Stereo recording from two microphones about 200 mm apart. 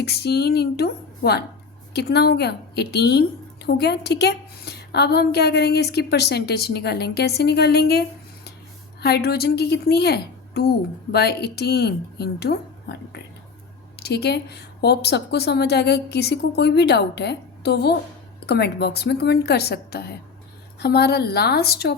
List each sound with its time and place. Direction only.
0.0 s a woman's voice: 55° left (ahead or behind)